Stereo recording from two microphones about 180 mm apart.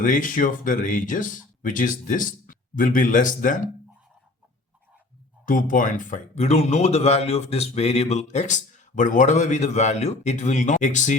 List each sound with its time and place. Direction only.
0.0 s speech: 45° left (ahead or behind)
5.5 s speech: 45° left (ahead or behind)